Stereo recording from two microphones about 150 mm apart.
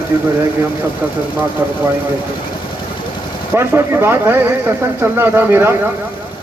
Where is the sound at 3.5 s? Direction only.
15° right (ahead or behind).